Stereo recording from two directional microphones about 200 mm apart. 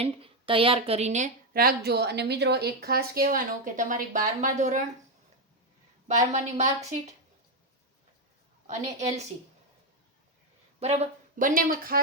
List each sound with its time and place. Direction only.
0.0 s a woman's voice: 25° right (ahead or behind)
6.1 s a woman's voice: 35° right (ahead or behind)
8.6 s a woman's voice: 35° right (ahead or behind)
10.8 s a woman's voice: 30° right (ahead or behind)